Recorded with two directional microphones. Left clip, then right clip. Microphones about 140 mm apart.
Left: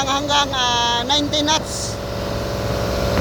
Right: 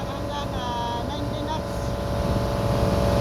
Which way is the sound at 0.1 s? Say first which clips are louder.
Left 12 dB; 15° left (ahead or behind).